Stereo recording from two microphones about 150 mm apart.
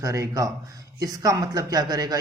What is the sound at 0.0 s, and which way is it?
A man's voice, 20° right (ahead or behind).